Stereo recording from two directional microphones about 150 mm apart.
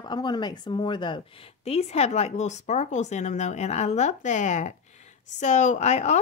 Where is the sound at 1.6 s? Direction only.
45° left (ahead or behind).